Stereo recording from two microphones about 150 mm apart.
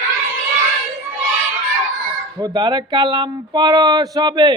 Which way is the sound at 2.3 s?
25° right (ahead or behind).